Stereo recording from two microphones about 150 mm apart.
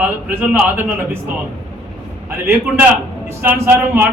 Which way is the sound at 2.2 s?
15° right (ahead or behind).